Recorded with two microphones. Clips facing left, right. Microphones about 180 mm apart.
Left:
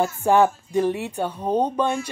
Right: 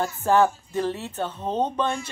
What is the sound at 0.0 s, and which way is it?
Speech, 15° left (ahead or behind).